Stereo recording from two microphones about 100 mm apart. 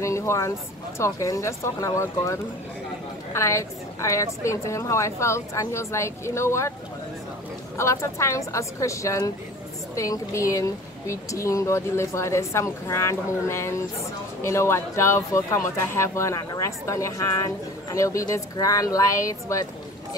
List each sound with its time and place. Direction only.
0.0 s speech: 30° left (ahead or behind)
7.7 s speech: 30° left (ahead or behind)